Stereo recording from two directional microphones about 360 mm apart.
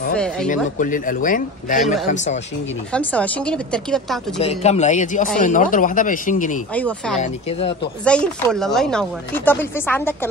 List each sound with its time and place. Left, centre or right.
0.1 s speech: centre
0.7 s speech: left
2.9 s speech: centre
4.4 s speech: centre
6.7 s speech: centre
7.2 s speech: centre
8.0 s speech: centre